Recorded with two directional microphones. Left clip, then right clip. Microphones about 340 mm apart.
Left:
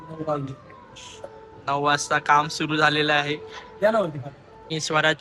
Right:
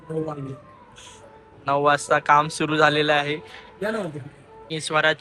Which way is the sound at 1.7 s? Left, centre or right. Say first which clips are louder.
Right 3 dB; centre.